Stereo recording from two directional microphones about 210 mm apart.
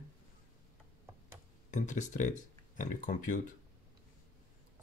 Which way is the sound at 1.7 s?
35° left (ahead or behind).